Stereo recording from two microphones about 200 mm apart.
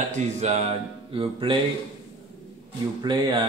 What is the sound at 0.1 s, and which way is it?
Speech, 35° right (ahead or behind).